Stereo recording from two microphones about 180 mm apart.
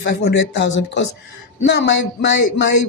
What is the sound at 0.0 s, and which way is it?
Speech, 75° left (ahead or behind).